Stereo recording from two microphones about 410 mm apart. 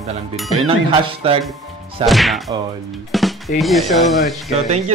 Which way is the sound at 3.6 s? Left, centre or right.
Centre.